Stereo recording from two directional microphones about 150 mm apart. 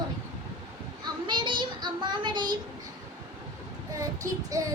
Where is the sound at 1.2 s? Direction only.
30° right (ahead or behind).